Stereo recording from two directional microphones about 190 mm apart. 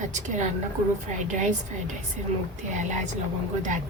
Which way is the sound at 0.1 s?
40° right (ahead or behind).